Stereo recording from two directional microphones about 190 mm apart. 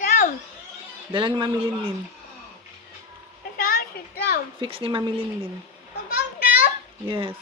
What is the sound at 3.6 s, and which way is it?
Children playing, 50° left (ahead or behind).